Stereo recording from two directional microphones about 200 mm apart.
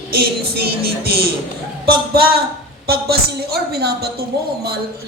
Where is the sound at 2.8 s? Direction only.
50° right (ahead or behind).